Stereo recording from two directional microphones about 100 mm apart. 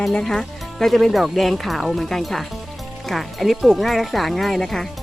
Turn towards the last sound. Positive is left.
turn(degrees=5)  # may be behind; listen again after turning